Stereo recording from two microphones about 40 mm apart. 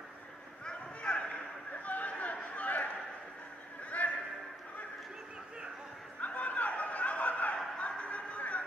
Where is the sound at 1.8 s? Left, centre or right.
Left.